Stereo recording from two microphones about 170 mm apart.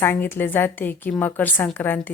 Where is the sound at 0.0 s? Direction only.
10° left (ahead or behind).